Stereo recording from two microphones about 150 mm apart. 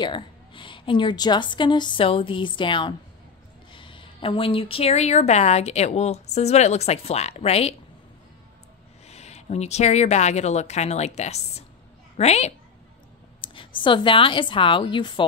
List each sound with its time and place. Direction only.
0.0 s a woman's voice: 35° left (ahead or behind)
9.0 s a woman's voice: 45° left (ahead or behind)
13.4 s a woman's voice: 35° left (ahead or behind)